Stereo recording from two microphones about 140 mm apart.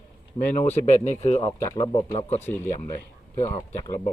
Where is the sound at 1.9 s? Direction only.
45° left (ahead or behind).